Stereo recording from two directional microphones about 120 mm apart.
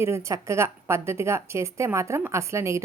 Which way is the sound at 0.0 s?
25° right (ahead or behind).